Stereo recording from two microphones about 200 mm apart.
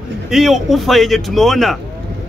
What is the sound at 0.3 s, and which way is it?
A man's voice, centre (ahead or behind).